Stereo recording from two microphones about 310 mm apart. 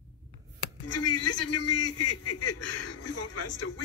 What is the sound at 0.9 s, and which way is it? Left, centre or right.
Speech, left.